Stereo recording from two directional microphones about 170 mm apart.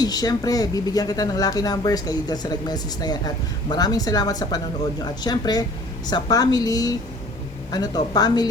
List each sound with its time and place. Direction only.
0.0 s a woman's voice: 20° left (ahead or behind)